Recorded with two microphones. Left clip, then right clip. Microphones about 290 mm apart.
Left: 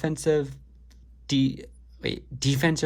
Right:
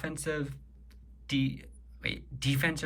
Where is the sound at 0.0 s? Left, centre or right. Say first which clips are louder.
Left 10 dB; centre.